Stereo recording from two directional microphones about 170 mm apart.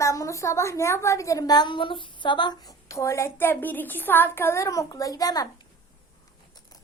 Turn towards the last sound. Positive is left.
turn(degrees=20)  # may be behind; listen again after turning